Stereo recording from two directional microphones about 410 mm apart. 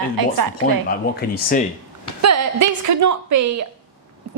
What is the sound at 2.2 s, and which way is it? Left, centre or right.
A woman's voice, right.